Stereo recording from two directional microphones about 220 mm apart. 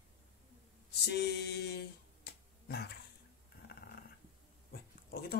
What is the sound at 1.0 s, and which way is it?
Speech, 50° left (ahead or behind).